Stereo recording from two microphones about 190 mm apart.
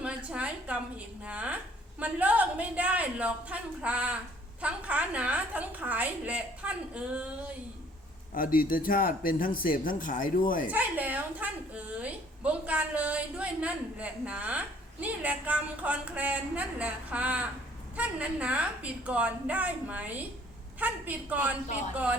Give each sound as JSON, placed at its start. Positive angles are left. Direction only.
{"t": 0.0, "sound": "a sound", "side_deg": -5}
{"t": 2.0, "sound": "a woman's voice", "side_deg": -10}
{"t": 8.3, "sound": "speech", "side_deg": 50}
{"t": 10.7, "sound": "a woman's voice", "side_deg": -10}